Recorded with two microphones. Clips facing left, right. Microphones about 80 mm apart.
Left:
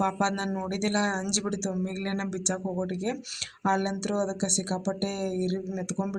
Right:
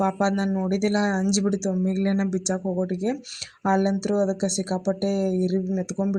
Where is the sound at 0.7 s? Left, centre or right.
Centre.